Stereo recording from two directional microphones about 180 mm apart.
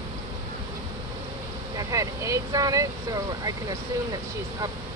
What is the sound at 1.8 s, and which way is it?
Vehicle, 20° right (ahead or behind).